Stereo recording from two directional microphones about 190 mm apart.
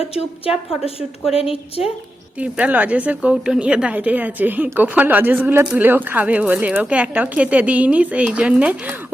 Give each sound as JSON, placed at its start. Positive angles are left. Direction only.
{"t": 0.0, "sound": "a woman's voice", "side_deg": 30}
{"t": 2.4, "sound": "a woman's voice", "side_deg": -5}